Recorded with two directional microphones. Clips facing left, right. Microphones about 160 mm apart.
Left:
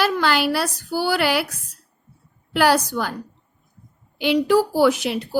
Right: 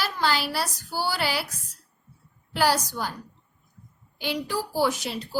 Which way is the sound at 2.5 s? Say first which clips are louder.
Left 6 dB; 65° left (ahead or behind).